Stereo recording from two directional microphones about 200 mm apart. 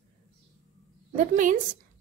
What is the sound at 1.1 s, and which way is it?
Speech, 40° right (ahead or behind).